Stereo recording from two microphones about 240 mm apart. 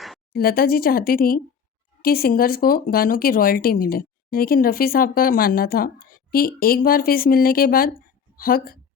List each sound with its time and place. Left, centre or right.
0.3 s speech: left